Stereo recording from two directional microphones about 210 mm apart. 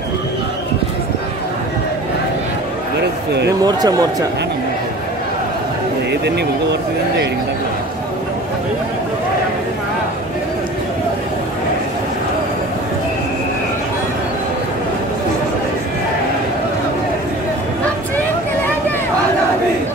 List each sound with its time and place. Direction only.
3.4 s speech: 20° right (ahead or behind)
6.2 s speech: 55° right (ahead or behind)
18.1 s vehicle: 10° left (ahead or behind)